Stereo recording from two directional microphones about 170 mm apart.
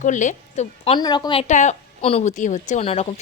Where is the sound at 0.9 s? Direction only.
25° left (ahead or behind).